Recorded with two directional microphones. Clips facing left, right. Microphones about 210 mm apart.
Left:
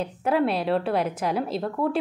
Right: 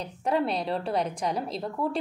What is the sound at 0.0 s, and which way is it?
A woman's voice, 5° left (ahead or behind).